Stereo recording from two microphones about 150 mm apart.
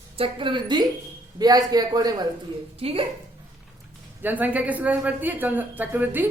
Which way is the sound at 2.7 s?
40° right (ahead or behind).